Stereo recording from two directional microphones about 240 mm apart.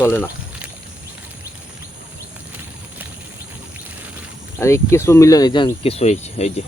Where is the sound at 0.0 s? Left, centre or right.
Centre.